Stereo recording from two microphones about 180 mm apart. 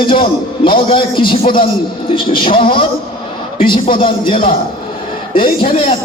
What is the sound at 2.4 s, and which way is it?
A man's voice, 30° left (ahead or behind).